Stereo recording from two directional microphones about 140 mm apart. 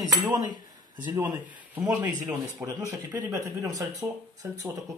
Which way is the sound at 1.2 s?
30° right (ahead or behind).